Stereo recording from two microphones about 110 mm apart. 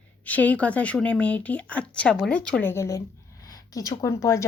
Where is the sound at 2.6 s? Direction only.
25° left (ahead or behind).